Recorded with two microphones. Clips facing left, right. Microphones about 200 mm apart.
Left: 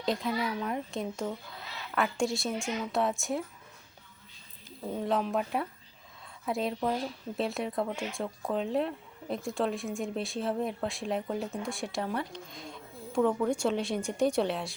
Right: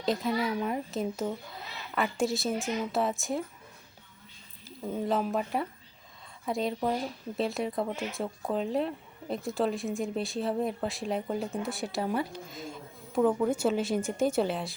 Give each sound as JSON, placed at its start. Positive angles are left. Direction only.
{"t": 0.0, "sound": "speech", "side_deg": 0}
{"t": 5.0, "sound": "speech", "side_deg": 0}